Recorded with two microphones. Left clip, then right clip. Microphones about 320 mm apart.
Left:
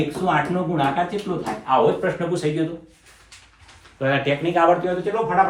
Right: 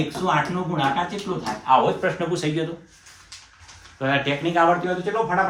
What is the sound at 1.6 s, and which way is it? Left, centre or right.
Speech, centre.